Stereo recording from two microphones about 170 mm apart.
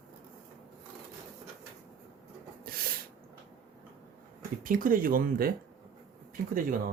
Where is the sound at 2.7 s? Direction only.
60° right (ahead or behind).